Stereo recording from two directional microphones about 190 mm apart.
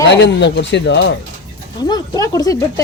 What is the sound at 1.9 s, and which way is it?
Speech, 20° left (ahead or behind).